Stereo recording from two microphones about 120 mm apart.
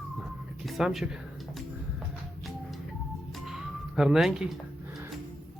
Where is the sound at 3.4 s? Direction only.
5° right (ahead or behind).